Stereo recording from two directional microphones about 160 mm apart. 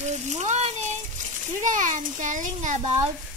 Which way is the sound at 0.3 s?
45° right (ahead or behind).